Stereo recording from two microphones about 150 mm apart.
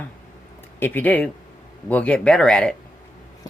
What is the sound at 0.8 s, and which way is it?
Speech, 10° left (ahead or behind).